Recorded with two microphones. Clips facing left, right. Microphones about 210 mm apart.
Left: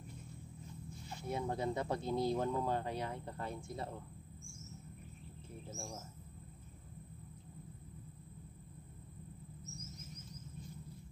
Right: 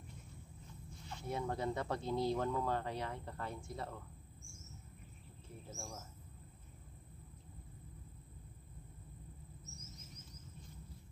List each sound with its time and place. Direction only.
1.1 s speech: 15° left (ahead or behind)